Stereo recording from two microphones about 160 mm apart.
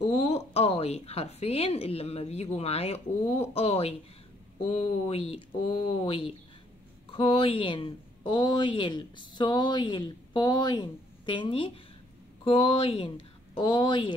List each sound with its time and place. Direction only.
0.0 s speech: 40° left (ahead or behind)